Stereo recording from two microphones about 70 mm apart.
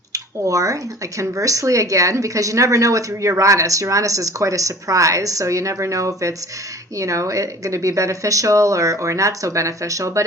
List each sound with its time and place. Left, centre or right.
0.1 s speech: right